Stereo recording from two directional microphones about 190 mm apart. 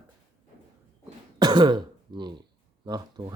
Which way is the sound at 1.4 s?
20° right (ahead or behind).